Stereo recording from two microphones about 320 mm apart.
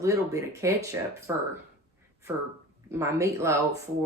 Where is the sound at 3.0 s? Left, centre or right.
Centre.